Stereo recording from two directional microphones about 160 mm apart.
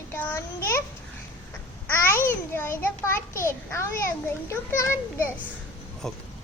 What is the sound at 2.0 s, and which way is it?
Babbling, 15° left (ahead or behind).